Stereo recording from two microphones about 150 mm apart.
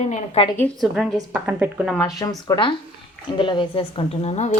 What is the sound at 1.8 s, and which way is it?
Speech, centre (ahead or behind).